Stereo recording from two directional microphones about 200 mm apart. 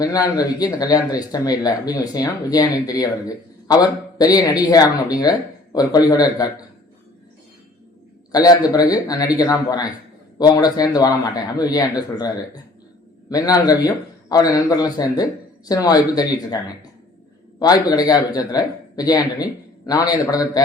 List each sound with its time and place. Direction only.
0.0 s a man's voice: 20° left (ahead or behind)
8.3 s a man's voice: 20° left (ahead or behind)
13.3 s a man's voice: 20° left (ahead or behind)
17.6 s a man's voice: 20° left (ahead or behind)